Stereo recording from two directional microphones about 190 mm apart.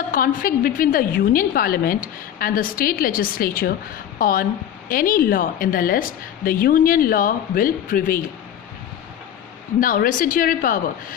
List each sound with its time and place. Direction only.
0.1 s a woman's voice: 45° left (ahead or behind)
9.8 s a woman's voice: 45° left (ahead or behind)